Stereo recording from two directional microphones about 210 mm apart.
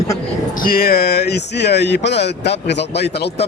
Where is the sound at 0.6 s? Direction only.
45° left (ahead or behind).